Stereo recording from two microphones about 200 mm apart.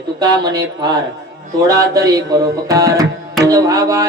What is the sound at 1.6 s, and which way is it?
Music, 15° right (ahead or behind).